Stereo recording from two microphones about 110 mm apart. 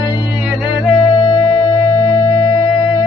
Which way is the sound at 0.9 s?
35° left (ahead or behind).